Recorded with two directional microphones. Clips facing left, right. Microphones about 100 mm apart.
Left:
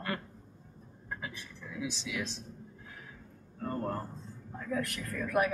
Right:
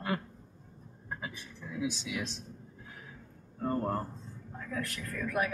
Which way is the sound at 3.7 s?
20° right (ahead or behind).